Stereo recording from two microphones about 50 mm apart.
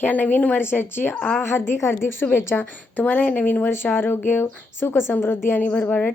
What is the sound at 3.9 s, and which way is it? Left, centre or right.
Speech, left.